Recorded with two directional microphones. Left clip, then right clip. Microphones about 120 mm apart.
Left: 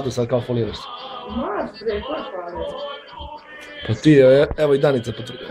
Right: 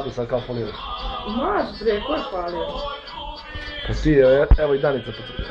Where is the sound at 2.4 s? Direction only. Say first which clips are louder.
Right 1 dB; 20° left (ahead or behind).